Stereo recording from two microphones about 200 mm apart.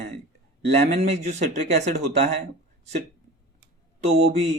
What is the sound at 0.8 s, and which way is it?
Speech, 35° right (ahead or behind).